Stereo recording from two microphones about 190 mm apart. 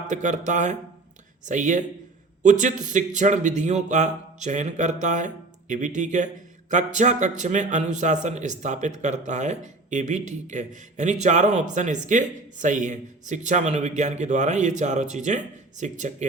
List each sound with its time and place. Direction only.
0.1 s a man's voice: 40° right (ahead or behind)